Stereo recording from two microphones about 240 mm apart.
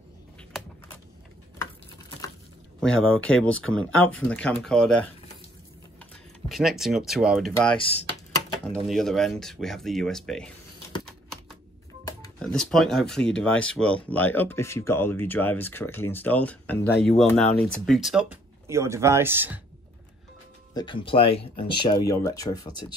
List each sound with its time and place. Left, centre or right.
2.8 s speech: centre
6.5 s speech: centre
7.7 s speech: left
8.7 s speech: centre
12.0 s telephone dialing: centre
12.4 s speech: centre
18.3 s speech: centre
20.7 s speech: centre